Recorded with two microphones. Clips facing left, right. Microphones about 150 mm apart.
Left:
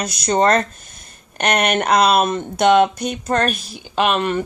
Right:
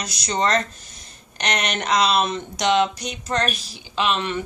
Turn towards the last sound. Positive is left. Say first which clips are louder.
# left 5 dB
turn(degrees=50)  # may be behind; listen again after turning